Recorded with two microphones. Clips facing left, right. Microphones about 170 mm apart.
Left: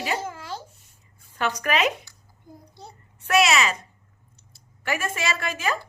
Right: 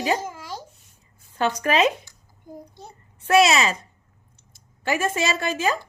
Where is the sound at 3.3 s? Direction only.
30° right (ahead or behind).